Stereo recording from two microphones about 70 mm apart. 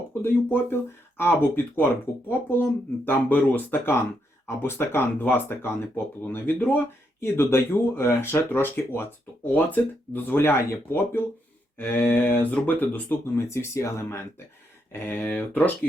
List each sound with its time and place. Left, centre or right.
0.1 s speech: left
13.3 s speech: left
15.0 s speech: left